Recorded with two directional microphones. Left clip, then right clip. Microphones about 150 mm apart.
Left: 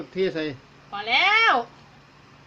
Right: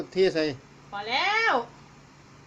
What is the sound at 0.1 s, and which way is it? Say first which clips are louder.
Speech: right 2 dB; 5° right (ahead or behind).